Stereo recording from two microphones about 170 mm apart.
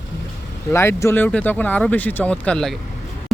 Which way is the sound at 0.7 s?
15° left (ahead or behind).